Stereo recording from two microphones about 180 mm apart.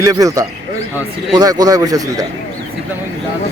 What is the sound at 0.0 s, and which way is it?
A man's voice, 20° right (ahead or behind).